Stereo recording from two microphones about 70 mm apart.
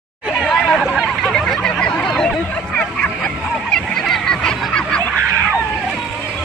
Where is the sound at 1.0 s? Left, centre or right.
Centre.